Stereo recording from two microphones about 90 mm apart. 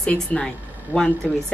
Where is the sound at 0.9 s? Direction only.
20° right (ahead or behind).